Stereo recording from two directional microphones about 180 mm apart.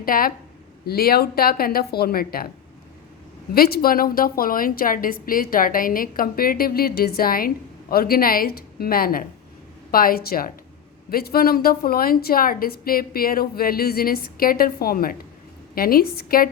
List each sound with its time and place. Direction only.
0.0 s a woman's voice: 55° left (ahead or behind)
3.5 s a woman's voice: 55° left (ahead or behind)